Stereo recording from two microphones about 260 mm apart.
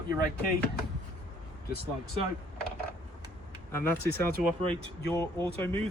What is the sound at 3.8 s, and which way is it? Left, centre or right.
Speech, centre.